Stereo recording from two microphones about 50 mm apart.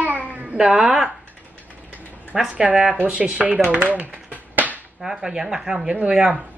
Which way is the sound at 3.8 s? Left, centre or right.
Right.